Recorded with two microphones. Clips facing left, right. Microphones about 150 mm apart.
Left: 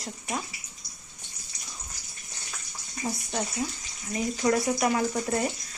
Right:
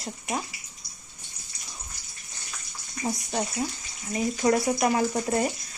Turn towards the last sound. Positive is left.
turn(degrees=-30)  # may be behind; listen again after turning